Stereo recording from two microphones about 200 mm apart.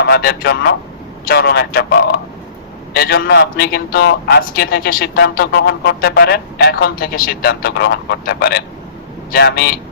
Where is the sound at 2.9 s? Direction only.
50° left (ahead or behind).